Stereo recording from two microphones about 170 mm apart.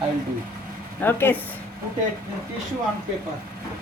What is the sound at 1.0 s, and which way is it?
Speech, 10° left (ahead or behind).